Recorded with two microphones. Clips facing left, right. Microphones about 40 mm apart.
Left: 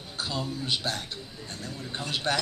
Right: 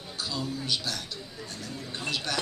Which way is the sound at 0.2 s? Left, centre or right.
Left.